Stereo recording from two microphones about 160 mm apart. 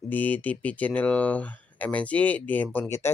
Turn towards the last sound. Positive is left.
turn(degrees=15)  # may be behind; listen again after turning